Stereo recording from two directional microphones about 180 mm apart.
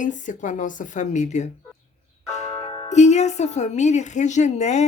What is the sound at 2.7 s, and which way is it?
Speech, 40° left (ahead or behind).